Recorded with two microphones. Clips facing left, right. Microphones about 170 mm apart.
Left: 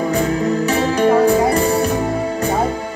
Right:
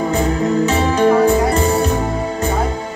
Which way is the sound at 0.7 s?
25° right (ahead or behind).